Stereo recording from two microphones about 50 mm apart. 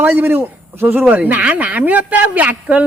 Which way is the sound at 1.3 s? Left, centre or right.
Right.